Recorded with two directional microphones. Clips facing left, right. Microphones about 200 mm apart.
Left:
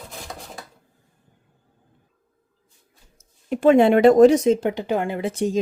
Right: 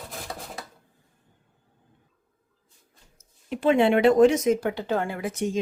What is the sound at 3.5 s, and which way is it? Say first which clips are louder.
A woman's voice: left 5 dB; 45° left (ahead or behind).